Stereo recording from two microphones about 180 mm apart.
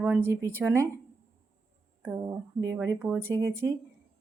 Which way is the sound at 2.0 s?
15° right (ahead or behind).